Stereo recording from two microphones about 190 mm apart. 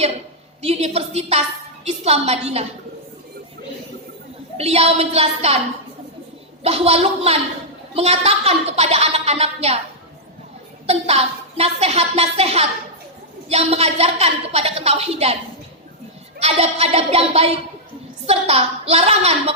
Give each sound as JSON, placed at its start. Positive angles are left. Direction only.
{"t": 0.6, "sound": "speech", "side_deg": -30}
{"t": 4.5, "sound": "speech", "side_deg": -30}
{"t": 6.6, "sound": "speech", "side_deg": -30}
{"t": 10.8, "sound": "speech", "side_deg": -35}
{"t": 16.4, "sound": "speech", "side_deg": -30}